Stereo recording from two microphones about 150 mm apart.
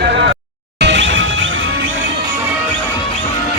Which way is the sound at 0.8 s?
90° right.